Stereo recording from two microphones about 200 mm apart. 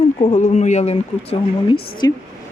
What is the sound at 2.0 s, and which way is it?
Speech, 20° left (ahead or behind).